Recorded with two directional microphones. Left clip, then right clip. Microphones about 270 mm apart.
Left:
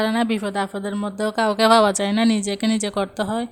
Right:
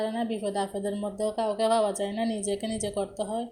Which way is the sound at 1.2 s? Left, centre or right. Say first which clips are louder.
Left 8 dB; left.